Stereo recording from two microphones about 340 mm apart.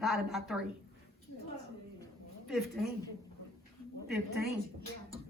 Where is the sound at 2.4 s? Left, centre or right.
Centre.